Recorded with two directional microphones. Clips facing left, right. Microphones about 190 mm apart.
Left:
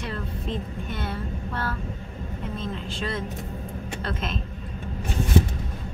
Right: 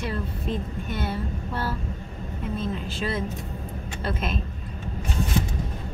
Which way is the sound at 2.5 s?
5° right (ahead or behind).